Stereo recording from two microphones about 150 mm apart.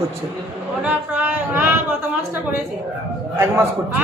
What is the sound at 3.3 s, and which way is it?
Speech, 15° right (ahead or behind).